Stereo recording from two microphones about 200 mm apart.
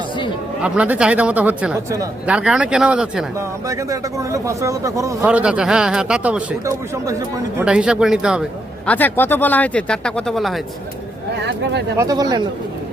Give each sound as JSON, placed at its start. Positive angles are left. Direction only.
{"t": 0.6, "sound": "a man's voice", "side_deg": -5}
{"t": 3.7, "sound": "a man's voice", "side_deg": -15}
{"t": 8.9, "sound": "speech", "side_deg": 10}
{"t": 11.3, "sound": "speech", "side_deg": -60}
{"t": 11.9, "sound": "speech", "side_deg": -20}